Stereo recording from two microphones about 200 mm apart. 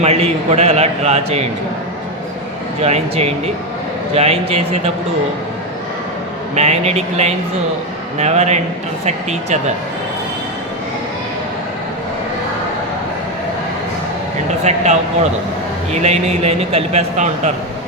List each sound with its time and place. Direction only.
0.0 s a man's voice: 30° right (ahead or behind)
2.8 s a man's voice: 30° right (ahead or behind)
6.6 s a man's voice: 35° right (ahead or behind)
14.6 s a man's voice: 35° right (ahead or behind)